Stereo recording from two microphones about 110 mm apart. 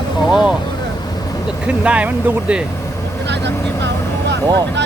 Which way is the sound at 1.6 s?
10° right (ahead or behind).